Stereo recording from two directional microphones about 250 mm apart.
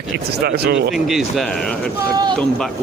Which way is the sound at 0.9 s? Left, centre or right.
Centre.